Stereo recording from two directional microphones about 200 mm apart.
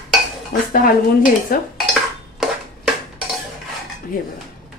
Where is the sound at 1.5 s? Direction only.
45° left (ahead or behind).